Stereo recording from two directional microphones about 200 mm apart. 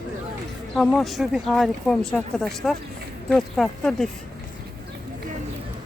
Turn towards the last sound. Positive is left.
turn(degrees=0)  # may be behind; listen again after turning